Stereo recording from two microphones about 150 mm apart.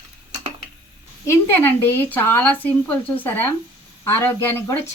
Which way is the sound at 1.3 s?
15° left (ahead or behind).